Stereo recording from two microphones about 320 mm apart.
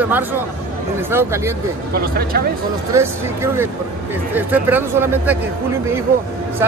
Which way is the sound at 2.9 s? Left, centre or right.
Centre.